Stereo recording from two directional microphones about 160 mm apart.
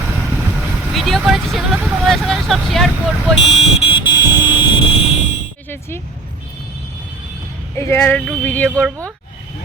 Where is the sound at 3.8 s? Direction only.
30° left (ahead or behind).